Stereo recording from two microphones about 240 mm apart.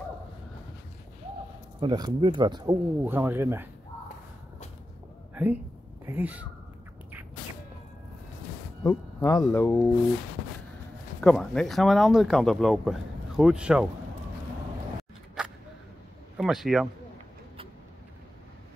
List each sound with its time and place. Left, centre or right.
1.8 s speech: centre
5.3 s a sound: centre
6.0 s speech: centre
8.8 s speech: centre
11.1 s speech: centre
15.4 s a sound: centre
16.3 s speech: centre